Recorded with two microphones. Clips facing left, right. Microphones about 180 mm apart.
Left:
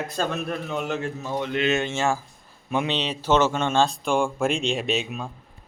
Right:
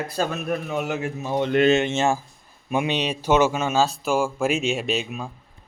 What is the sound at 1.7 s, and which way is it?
Speech, 20° right (ahead or behind).